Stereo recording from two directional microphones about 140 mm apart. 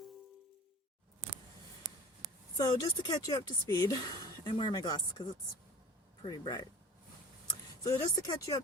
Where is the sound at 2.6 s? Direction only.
30° left (ahead or behind).